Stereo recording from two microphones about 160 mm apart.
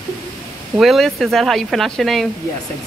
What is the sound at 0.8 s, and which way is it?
Speech, centre (ahead or behind).